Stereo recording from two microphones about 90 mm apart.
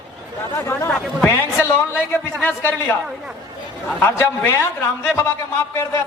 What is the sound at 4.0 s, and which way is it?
A man's voice, 25° left (ahead or behind).